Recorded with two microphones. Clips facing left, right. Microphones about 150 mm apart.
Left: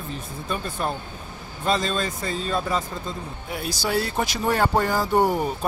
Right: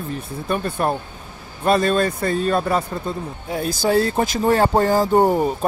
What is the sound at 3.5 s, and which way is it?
Speech, 40° right (ahead or behind).